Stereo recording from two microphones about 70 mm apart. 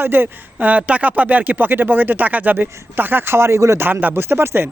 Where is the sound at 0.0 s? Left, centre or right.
Right.